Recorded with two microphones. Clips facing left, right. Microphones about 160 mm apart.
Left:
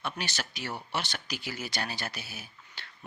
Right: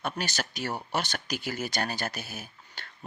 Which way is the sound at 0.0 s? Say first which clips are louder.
Right 3 dB; 45° right (ahead or behind).